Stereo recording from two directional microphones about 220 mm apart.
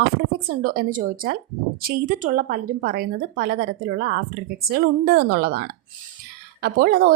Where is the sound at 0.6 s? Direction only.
40° right (ahead or behind).